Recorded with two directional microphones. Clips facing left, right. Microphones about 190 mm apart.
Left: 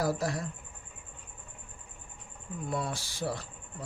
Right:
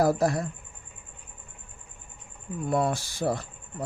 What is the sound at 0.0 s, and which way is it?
Speech, 50° right (ahead or behind).